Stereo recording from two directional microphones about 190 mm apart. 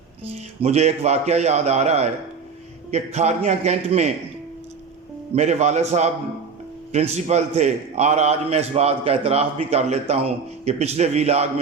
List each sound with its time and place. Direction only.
0.3 s a man's voice: 35° right (ahead or behind)
5.3 s a man's voice: 35° right (ahead or behind)